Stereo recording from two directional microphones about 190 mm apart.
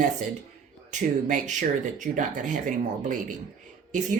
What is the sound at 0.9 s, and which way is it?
Speech, 40° right (ahead or behind).